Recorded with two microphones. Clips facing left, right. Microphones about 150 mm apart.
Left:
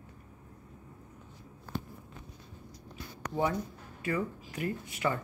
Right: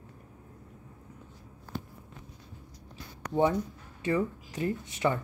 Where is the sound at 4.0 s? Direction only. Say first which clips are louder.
Right 4 dB; 20° right (ahead or behind).